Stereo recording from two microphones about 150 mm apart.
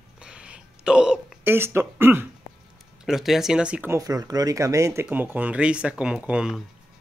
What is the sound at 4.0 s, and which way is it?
Speech, 25° right (ahead or behind).